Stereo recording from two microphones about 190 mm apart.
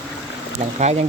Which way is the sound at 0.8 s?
35° right (ahead or behind).